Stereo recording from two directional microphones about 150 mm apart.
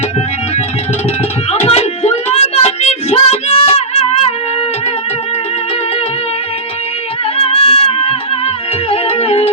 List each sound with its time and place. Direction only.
1.5 s child singing: 45° left (ahead or behind)
7.3 s music: 40° left (ahead or behind)